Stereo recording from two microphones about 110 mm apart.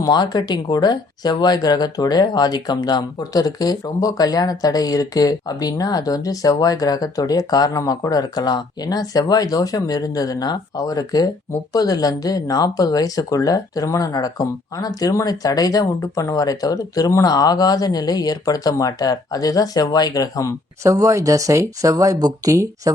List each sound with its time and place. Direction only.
0.0 s speech: 40° left (ahead or behind)
20.8 s speech: 30° right (ahead or behind)